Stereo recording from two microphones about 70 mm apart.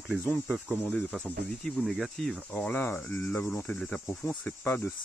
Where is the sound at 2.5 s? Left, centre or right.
Centre.